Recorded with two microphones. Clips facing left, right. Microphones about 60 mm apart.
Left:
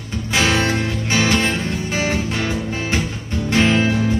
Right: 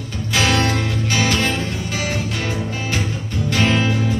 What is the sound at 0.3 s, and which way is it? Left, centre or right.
Music, left.